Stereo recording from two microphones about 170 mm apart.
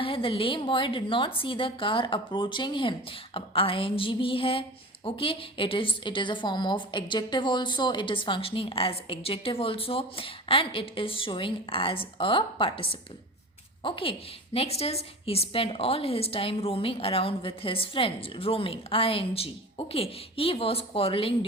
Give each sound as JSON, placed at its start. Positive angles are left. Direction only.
{"t": 0.0, "sound": "a woman's voice", "side_deg": 30}